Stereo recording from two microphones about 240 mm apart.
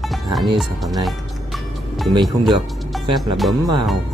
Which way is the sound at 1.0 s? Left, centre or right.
Centre.